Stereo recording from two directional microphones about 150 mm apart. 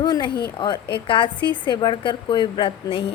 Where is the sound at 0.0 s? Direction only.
30° left (ahead or behind).